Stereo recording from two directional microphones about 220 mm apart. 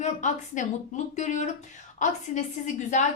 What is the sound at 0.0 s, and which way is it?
A woman's voice, 35° left (ahead or behind).